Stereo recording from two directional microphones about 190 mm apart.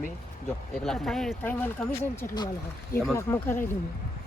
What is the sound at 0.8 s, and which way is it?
Speech, centre (ahead or behind).